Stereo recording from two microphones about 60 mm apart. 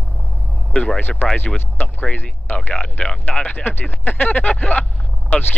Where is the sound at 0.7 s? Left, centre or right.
Left.